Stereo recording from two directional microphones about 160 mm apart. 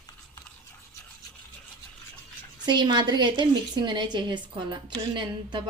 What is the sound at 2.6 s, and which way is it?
A woman's voice, 30° right (ahead or behind).